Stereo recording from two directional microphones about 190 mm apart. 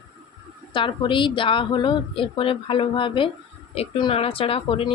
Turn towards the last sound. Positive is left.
turn(degrees=30)  # may be behind; listen again after turning